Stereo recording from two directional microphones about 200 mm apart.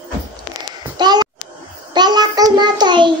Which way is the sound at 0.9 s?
20° right (ahead or behind).